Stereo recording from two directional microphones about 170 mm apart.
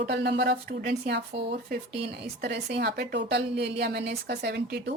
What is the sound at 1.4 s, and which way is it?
Speech, 80° right.